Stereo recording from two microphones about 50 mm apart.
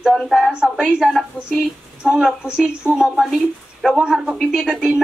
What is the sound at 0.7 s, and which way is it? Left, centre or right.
A woman's voice, centre.